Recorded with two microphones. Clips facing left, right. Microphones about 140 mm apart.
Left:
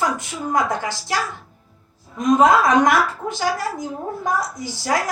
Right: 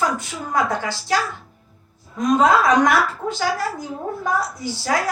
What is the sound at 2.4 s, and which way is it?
A woman's voice, 20° left (ahead or behind).